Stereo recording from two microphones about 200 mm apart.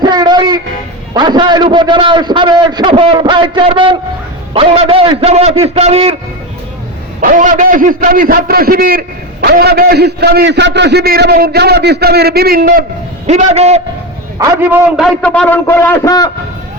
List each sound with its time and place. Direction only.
0.0 s a sound: 20° right (ahead or behind)
1.1 s a man's voice: 20° right (ahead or behind)
7.2 s a man's voice: 40° right (ahead or behind)
13.2 s a man's voice: 35° right (ahead or behind)
14.3 s a man's voice: 10° right (ahead or behind); by 16.3 s 20° left (ahead or behind)